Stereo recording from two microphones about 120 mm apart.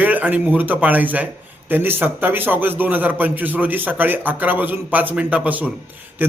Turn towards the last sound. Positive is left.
turn(degrees=-15)  # may be behind; listen again after turning